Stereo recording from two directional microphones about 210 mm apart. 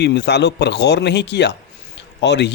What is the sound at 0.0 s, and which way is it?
A man's voice, 55° left (ahead or behind).